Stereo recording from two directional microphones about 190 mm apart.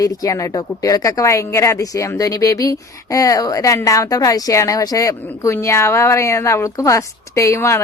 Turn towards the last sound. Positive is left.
turn(degrees=15)  # may be behind; listen again after turning